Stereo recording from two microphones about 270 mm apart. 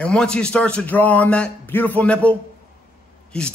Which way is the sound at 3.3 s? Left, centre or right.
Centre.